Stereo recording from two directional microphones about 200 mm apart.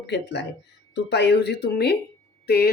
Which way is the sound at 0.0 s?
60° left (ahead or behind).